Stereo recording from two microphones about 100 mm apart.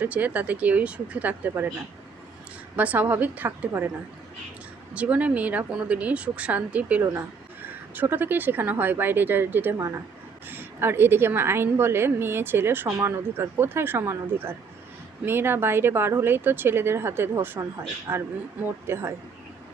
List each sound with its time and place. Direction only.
0.0 s speech: 15° right (ahead or behind)
2.7 s speech: 15° right (ahead or behind)
4.9 s speech: 15° right (ahead or behind)
7.0 s a woman's voice: 25° right (ahead or behind)
9.7 s a woman's voice: 30° right (ahead or behind)